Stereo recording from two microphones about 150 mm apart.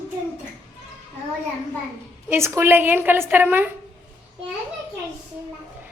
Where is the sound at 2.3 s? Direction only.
15° right (ahead or behind).